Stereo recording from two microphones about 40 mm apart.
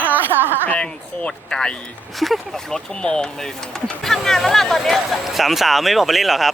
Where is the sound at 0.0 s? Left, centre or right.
Right.